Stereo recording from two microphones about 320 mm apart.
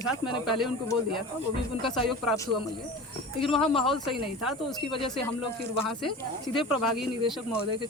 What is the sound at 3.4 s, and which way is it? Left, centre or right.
Speech, centre.